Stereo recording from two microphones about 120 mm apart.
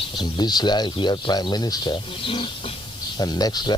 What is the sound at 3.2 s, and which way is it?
Speech, 35° left (ahead or behind).